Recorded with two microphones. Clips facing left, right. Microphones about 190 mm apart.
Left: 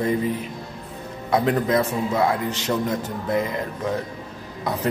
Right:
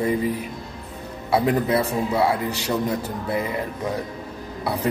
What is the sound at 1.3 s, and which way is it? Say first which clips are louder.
A man's voice: even; 10° right (ahead or behind).